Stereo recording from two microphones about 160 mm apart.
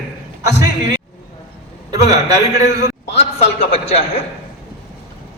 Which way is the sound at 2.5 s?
45° left (ahead or behind).